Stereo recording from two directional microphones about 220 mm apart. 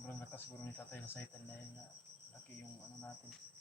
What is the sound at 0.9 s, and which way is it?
Speech, 10° left (ahead or behind).